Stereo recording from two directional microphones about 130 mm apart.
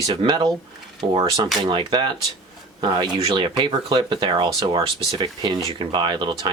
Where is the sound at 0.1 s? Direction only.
40° right (ahead or behind).